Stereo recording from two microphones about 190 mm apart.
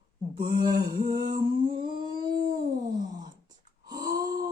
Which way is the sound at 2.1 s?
45° right (ahead or behind).